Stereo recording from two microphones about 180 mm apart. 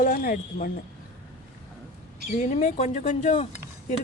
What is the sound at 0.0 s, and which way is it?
Speech, 50° left (ahead or behind).